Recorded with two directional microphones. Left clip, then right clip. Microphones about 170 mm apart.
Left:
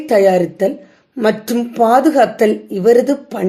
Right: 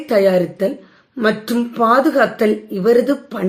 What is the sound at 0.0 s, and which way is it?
A woman's voice, 20° left (ahead or behind).